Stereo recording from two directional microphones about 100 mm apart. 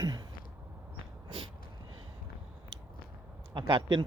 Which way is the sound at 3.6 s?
50° right (ahead or behind).